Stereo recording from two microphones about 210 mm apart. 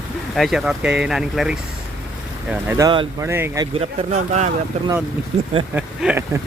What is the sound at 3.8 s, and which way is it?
Speech, 35° right (ahead or behind).